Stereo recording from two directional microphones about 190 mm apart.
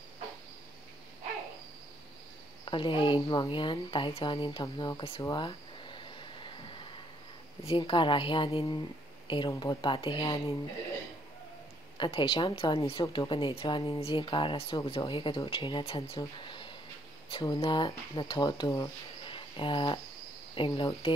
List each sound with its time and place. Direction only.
2.6 s speech: 25° left (ahead or behind)
5.2 s a sound: 25° left (ahead or behind)
7.6 s speech: 25° left (ahead or behind)
12.0 s speech: 25° left (ahead or behind)